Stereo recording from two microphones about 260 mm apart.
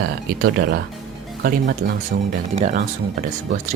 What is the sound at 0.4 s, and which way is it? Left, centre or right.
Speech, right.